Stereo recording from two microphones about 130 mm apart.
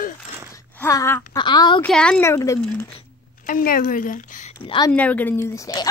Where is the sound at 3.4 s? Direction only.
90° left.